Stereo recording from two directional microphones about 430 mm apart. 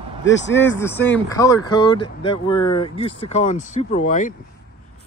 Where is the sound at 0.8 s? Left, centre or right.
Centre.